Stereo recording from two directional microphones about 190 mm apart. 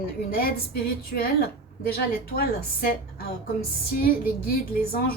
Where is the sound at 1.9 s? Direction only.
55° left (ahead or behind).